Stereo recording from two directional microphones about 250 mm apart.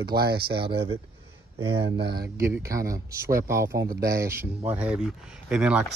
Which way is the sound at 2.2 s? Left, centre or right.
Centre.